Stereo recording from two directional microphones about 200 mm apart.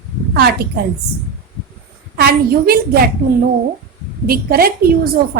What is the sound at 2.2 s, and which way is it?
Speech, 50° right (ahead or behind).